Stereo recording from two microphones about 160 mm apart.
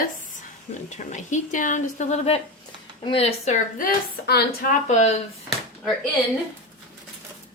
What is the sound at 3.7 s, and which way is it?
Speech, 70° left (ahead or behind).